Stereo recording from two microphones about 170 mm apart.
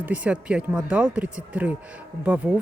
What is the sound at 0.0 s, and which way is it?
Speech, 10° right (ahead or behind).